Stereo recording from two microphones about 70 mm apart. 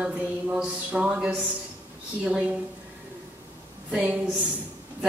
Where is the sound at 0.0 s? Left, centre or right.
Centre.